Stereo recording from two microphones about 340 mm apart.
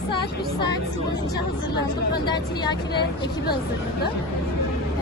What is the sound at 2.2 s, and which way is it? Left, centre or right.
Speech, centre.